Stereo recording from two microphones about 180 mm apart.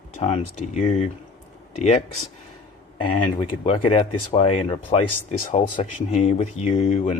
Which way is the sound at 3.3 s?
35° left (ahead or behind).